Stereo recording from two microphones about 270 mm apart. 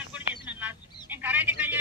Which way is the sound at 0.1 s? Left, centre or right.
Centre.